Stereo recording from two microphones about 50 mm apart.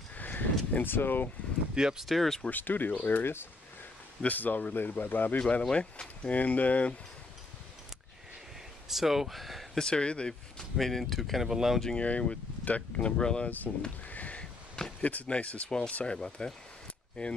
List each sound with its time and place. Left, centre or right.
0.1 s a sound: left
1.8 s speech: centre
2.0 s speech: centre
2.5 s speech: left
5.4 s speech: centre
8.8 s speech: centre
9.8 s speech: centre
10.6 s speech: centre
12.0 s speech: left
14.0 s sniff: left
15.0 s speech: left